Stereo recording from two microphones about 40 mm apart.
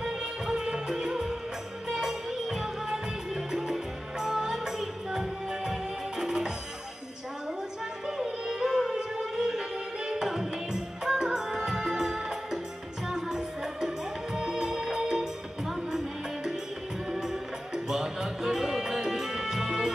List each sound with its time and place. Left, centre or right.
0.0 s music of bollywood: centre
1.9 s music: centre
8.2 s music: centre
17.1 s music: centre